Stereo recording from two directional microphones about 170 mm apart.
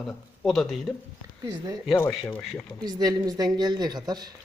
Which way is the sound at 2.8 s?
25° right (ahead or behind).